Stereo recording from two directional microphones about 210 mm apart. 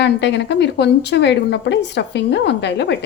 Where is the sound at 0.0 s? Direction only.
55° left (ahead or behind).